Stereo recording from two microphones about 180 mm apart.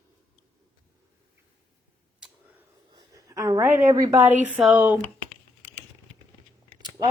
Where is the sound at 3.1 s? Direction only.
20° right (ahead or behind).